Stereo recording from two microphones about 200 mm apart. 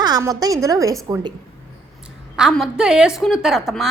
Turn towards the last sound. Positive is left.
turn(degrees=0)  # may be behind; listen again after turning